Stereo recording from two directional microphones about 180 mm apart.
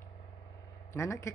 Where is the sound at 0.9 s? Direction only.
15° left (ahead or behind).